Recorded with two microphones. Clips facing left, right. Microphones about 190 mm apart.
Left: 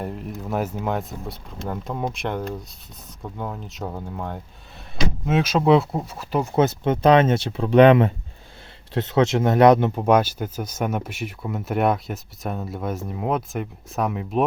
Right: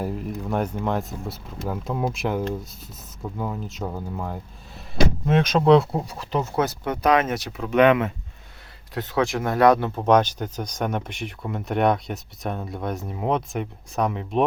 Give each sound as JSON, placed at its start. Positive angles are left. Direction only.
{"t": 0.0, "sound": "speech", "side_deg": 0}
{"t": 6.6, "sound": "speech", "side_deg": 25}
{"t": 10.1, "sound": "speech", "side_deg": 10}